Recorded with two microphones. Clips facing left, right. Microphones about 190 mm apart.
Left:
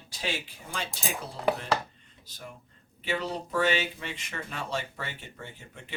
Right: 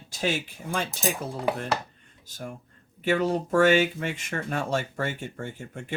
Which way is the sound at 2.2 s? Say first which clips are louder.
Right 7 dB; 45° right (ahead or behind).